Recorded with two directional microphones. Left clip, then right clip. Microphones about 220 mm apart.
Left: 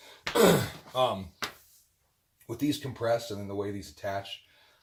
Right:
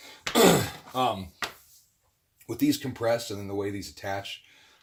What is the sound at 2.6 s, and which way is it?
Speech, 45° right (ahead or behind).